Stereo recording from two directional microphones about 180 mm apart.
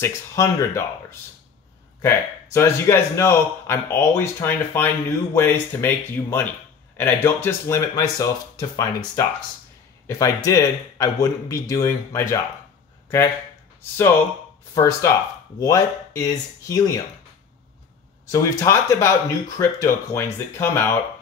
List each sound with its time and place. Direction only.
0.0 s a man's voice: 15° left (ahead or behind)
2.0 s a man's voice: 15° left (ahead or behind)
14.7 s a man's voice: 15° left (ahead or behind)
18.3 s a man's voice: 15° left (ahead or behind)